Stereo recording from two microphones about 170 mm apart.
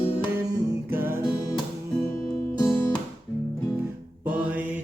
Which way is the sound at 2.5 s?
20° left (ahead or behind).